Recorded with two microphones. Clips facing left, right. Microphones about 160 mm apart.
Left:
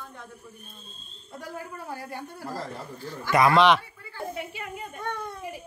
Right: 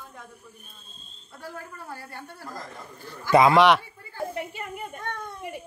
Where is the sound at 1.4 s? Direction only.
15° left (ahead or behind).